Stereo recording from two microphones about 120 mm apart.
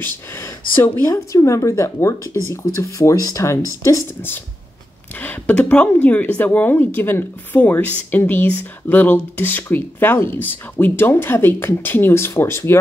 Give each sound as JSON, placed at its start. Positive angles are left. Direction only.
{"t": 0.0, "sound": "speech", "side_deg": 20}